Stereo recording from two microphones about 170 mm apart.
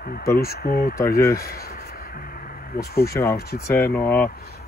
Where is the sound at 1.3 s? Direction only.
60° left (ahead or behind).